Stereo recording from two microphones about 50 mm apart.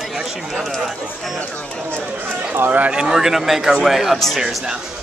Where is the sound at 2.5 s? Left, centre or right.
Right.